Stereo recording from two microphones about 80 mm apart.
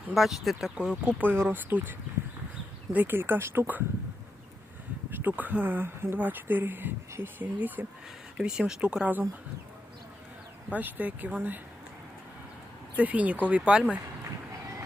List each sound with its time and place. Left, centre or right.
0.1 s speech: centre
1.2 s speech: right
5.1 s speech: right
8.4 s speech: centre
10.7 s speech: right
13.0 s speech: centre